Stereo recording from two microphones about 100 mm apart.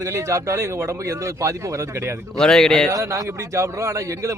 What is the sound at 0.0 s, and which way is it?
A man's voice, 30° right (ahead or behind).